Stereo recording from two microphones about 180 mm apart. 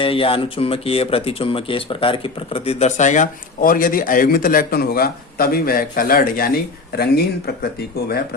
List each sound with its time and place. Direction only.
0.0 s speech: 30° left (ahead or behind); by 8.2 s 60° left (ahead or behind)